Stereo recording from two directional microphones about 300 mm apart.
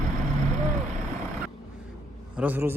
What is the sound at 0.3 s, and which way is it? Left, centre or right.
Vehicle, right.